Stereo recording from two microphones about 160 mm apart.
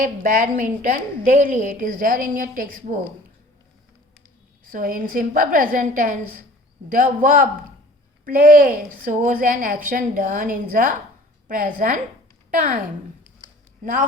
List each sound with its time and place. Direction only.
0.0 s a woman's voice: 55° right (ahead or behind)
4.6 s a woman's voice: 60° right (ahead or behind)